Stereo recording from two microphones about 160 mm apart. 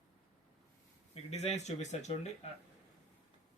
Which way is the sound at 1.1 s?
40° left (ahead or behind).